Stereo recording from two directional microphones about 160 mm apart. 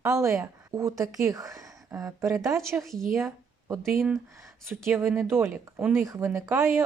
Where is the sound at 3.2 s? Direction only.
15° right (ahead or behind).